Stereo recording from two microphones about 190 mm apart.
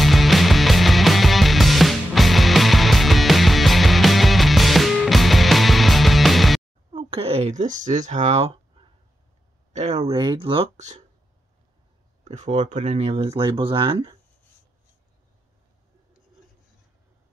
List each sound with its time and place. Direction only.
0.0 s music: centre (ahead or behind)
6.9 s speech: 30° right (ahead or behind)
9.7 s speech: 35° right (ahead or behind)
12.3 s speech: 35° right (ahead or behind)